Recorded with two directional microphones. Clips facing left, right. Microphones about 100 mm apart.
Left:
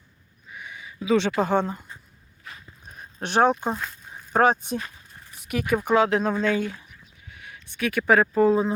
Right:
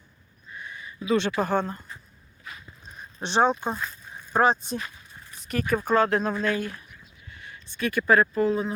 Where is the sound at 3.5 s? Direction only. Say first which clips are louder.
Left 2 dB; 15° left (ahead or behind).